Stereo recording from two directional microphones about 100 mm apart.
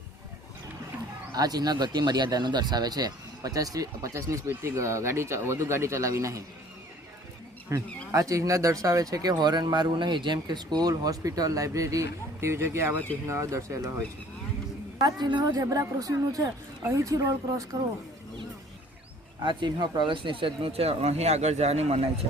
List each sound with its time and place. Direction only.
1.3 s speech: 40° right (ahead or behind)
7.7 s speech: 30° right (ahead or behind)
14.9 s speech: 45° right (ahead or behind)
19.4 s speech: 50° right (ahead or behind); by 22.1 s 90° right